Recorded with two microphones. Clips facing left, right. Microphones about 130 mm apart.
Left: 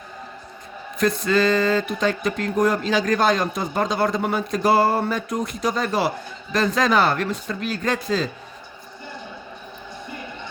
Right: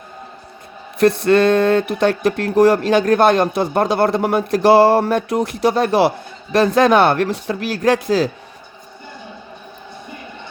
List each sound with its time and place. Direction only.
0.9 s speech: 65° right (ahead or behind)